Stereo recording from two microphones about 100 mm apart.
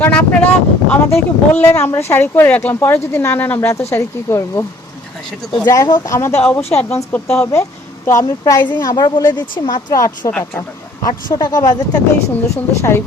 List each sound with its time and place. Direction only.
0.0 s speech: 20° left (ahead or behind)
5.6 s speech: 40° left (ahead or behind)
8.2 s a woman's voice: 45° left (ahead or behind)
12.5 s speech: 25° left (ahead or behind)